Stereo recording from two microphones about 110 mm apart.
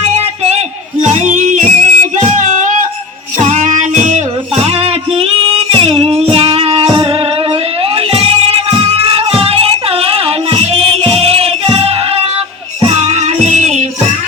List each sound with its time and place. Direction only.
1.0 s music: 90° right
4.6 s music: 65° right (ahead or behind)
6.8 s music: 45° right (ahead or behind)
7.9 s music: 65° right (ahead or behind)
12.8 s music: 75° right (ahead or behind)